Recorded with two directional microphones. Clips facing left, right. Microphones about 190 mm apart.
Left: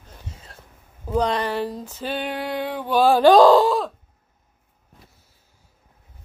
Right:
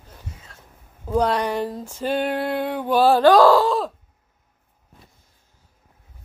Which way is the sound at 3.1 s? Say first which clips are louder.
Left 3 dB; 20° left (ahead or behind).